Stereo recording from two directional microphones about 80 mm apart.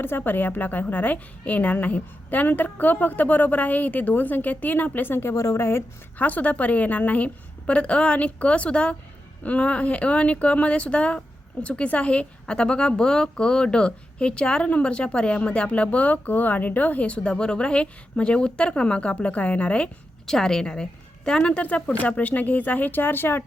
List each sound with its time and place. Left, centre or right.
0.0 s a woman's voice: left
6.1 s a woman's voice: left